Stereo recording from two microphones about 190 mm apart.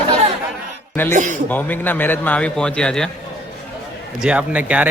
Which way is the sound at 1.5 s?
10° left (ahead or behind).